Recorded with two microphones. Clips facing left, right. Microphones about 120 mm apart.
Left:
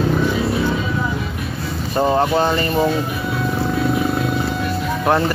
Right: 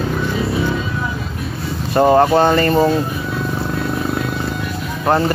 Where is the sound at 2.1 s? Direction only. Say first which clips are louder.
Right 5 dB; 40° right (ahead or behind).